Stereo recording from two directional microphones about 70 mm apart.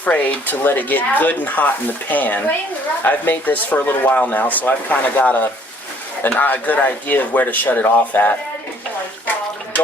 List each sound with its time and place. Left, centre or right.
0.0 s speech: left